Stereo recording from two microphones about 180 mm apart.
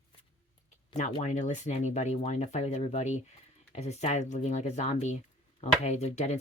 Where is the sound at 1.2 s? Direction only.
40° left (ahead or behind).